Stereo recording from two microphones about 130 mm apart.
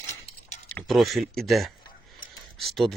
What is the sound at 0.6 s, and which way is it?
Speech, 5° left (ahead or behind).